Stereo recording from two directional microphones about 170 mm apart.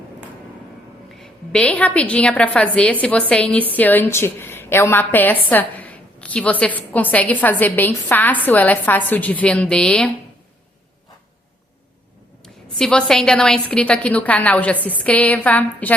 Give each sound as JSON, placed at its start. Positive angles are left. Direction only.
{"t": 1.1, "sound": "a woman's voice", "side_deg": 5}
{"t": 12.7, "sound": "a woman's voice", "side_deg": 5}